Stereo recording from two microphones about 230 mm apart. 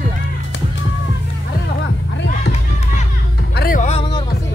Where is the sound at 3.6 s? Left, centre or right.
Left.